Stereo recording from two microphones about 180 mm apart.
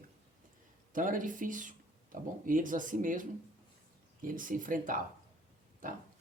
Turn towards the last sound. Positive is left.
turn(degrees=-50)  # may be behind; listen again after turning